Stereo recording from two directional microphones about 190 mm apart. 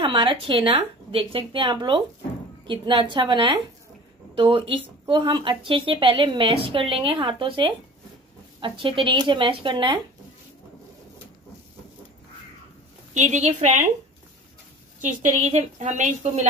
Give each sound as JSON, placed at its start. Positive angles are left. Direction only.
{"t": 0.0, "sound": "speech", "side_deg": -30}
{"t": 13.1, "sound": "a woman's voice", "side_deg": -40}
{"t": 15.0, "sound": "a woman's voice", "side_deg": -40}